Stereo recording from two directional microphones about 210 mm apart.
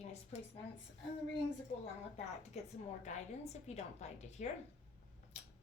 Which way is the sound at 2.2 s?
30° left (ahead or behind).